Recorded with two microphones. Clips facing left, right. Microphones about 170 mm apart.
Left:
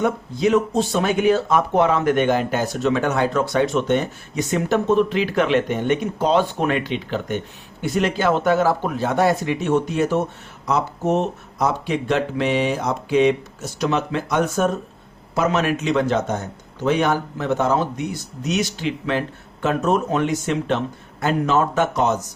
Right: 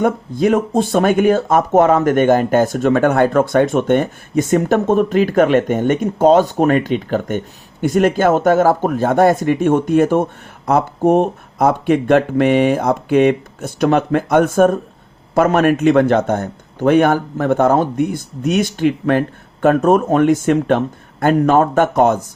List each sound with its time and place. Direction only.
0.0 s speech: 50° right (ahead or behind)